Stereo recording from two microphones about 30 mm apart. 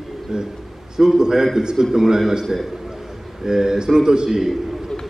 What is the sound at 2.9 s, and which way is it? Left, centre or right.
A man's voice, centre.